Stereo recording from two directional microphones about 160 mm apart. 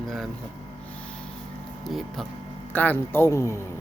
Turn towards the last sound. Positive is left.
turn(degrees=15)  # may be behind; listen again after turning